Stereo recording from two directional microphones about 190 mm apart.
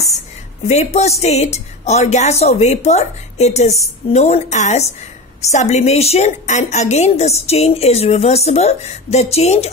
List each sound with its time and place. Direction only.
0.7 s a woman's voice: 35° left (ahead or behind)